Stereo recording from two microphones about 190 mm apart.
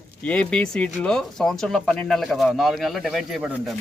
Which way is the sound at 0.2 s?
5° left (ahead or behind).